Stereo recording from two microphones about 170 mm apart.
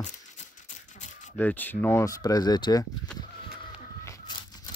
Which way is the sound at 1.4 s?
10° left (ahead or behind).